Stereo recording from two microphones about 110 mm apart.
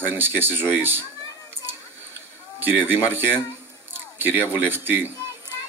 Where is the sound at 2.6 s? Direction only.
20° right (ahead or behind).